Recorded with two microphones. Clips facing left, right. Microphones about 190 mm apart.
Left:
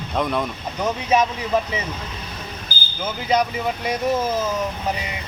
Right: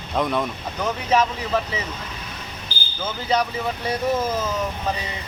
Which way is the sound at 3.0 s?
15° left (ahead or behind).